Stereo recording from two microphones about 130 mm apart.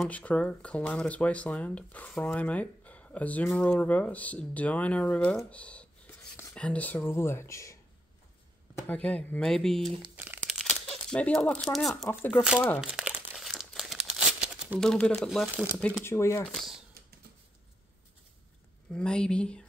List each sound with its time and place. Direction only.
0.1 s speech: 10° left (ahead or behind)
8.7 s speech: 15° left (ahead or behind)
10.1 s crumpling: 15° right (ahead or behind)
10.4 s crumpling: centre (ahead or behind)
11.7 s speech: centre (ahead or behind)
12.5 s speech: 10° left (ahead or behind)
12.8 s crumpling: 5° right (ahead or behind)
14.8 s speech: 5° left (ahead or behind)
15.4 s speech: 10° right (ahead or behind)
16.0 s speech: 20° left (ahead or behind)
16.4 s speech: centre (ahead or behind)
18.9 s speech: 5° left (ahead or behind)